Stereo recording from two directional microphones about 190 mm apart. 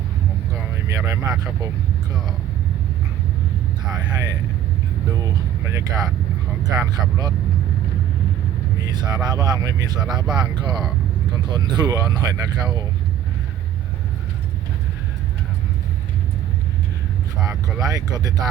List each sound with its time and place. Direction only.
0.9 s speech: 15° right (ahead or behind)
3.9 s speech: 20° right (ahead or behind)
8.8 s speech: 20° right (ahead or behind)
17.7 s speech: 20° right (ahead or behind)